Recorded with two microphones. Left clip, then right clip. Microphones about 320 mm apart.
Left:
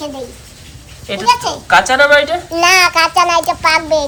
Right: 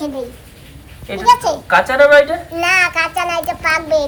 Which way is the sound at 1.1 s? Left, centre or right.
Centre.